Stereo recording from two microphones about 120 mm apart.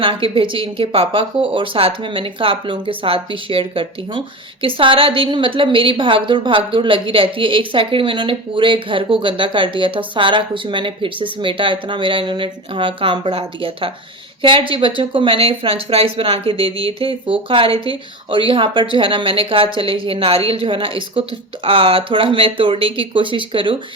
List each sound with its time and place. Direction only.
0.0 s a woman's voice: 45° right (ahead or behind)